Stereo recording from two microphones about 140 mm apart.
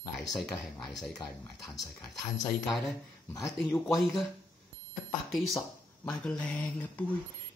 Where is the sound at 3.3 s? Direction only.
Centre (ahead or behind).